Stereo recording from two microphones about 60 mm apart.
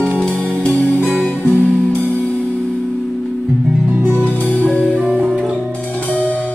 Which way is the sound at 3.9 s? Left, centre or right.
Right.